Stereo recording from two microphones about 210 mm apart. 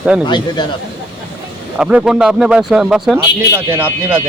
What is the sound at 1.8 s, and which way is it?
Speech, 5° right (ahead or behind).